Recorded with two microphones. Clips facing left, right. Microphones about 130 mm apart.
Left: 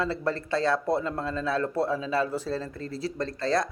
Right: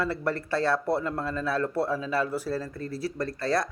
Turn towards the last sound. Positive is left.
turn(degrees=25)  # may be behind; listen again after turning